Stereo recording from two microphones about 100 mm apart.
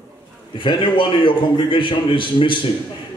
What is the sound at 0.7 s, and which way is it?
A man's voice, 55° left (ahead or behind).